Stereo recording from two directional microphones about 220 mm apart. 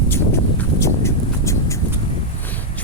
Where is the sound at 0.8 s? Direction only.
15° left (ahead or behind).